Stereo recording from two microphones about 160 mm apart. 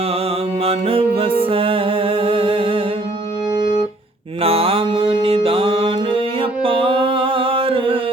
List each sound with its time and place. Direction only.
0.6 s mantra: 35° right (ahead or behind)
1.5 s music: 35° right (ahead or behind)
4.4 s music: 35° right (ahead or behind)